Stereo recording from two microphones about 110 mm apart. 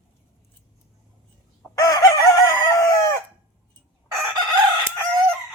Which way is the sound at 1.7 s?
30° left (ahead or behind).